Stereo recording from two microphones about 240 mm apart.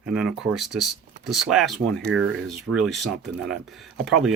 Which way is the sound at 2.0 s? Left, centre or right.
Right.